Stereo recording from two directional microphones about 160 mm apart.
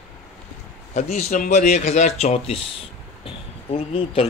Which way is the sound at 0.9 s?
45° left (ahead or behind).